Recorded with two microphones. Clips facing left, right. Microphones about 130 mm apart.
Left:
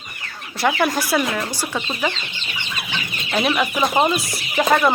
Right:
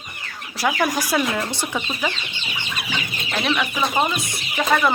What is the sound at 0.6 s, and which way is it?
Speech, 10° right (ahead or behind).